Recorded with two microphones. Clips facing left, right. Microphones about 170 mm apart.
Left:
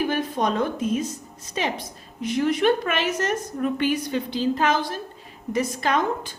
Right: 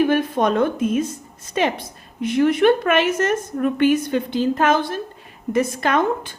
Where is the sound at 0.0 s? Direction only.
55° right (ahead or behind).